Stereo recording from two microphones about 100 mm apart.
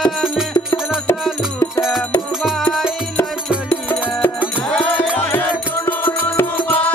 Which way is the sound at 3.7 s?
20° left (ahead or behind).